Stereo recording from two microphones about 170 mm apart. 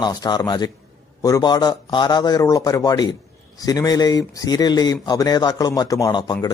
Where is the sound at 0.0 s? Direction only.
25° left (ahead or behind).